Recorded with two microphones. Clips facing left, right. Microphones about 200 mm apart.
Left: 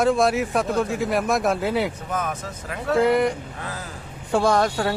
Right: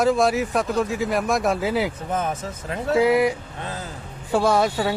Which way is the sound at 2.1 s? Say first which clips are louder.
Right 2 dB; 25° right (ahead or behind).